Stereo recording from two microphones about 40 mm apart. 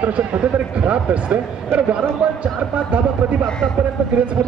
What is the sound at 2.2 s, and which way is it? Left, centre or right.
Speech, right.